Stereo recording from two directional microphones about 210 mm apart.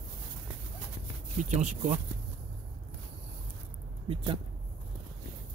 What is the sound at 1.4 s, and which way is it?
Speech, 35° right (ahead or behind).